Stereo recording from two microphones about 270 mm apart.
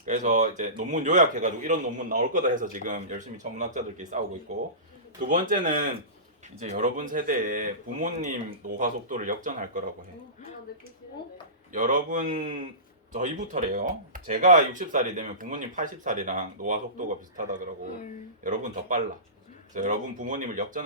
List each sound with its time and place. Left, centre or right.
0.0 s a man's voice: right
5.2 s a man's voice: right
11.7 s a man's voice: right
18.4 s a man's voice: right